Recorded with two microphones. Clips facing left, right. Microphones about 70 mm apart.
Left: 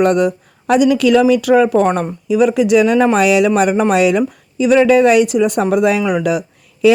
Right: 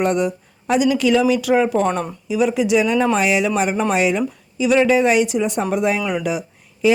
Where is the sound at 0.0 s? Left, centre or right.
Left.